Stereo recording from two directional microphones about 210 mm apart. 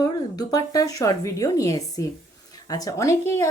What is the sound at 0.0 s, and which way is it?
Speech, 15° left (ahead or behind).